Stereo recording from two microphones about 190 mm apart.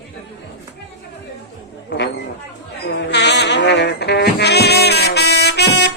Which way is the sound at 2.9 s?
65° left (ahead or behind).